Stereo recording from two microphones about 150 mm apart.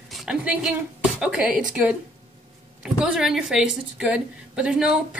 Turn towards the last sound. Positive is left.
turn(degrees=-5)  # may be behind; listen again after turning